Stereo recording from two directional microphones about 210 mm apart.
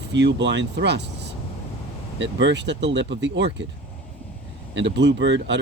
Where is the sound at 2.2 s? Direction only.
60° right (ahead or behind).